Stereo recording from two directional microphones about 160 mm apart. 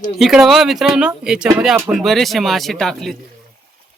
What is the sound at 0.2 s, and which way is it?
Speech, centre (ahead or behind).